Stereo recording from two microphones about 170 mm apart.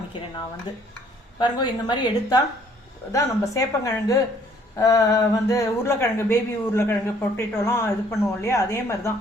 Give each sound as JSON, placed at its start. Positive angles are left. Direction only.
{"t": 0.7, "sound": "a woman's voice", "side_deg": 25}